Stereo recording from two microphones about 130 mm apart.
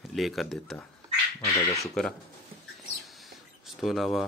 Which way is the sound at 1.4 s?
25° left (ahead or behind).